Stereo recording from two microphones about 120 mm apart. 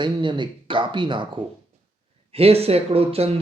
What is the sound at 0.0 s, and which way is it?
Speech, 40° right (ahead or behind).